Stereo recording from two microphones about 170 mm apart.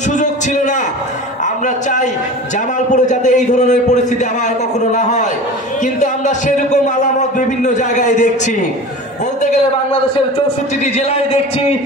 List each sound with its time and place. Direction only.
0.1 s a sound: 45° left (ahead or behind)
2.9 s a man's voice: 45° left (ahead or behind)
10.8 s a man's voice: 40° left (ahead or behind)